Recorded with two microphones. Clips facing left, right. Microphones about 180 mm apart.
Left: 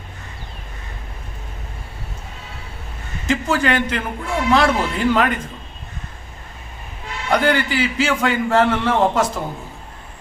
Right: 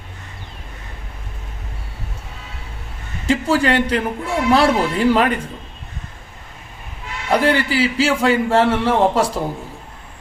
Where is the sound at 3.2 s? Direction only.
30° right (ahead or behind).